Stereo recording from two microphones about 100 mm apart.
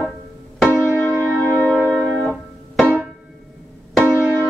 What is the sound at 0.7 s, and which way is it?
Music, 30° right (ahead or behind).